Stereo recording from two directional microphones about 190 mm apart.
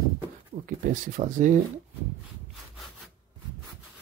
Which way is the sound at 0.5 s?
45° right (ahead or behind).